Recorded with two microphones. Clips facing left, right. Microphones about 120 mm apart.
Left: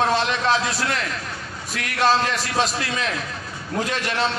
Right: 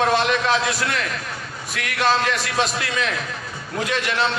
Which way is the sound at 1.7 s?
35° left (ahead or behind).